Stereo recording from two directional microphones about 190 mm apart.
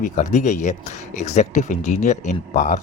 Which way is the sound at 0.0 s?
40° left (ahead or behind).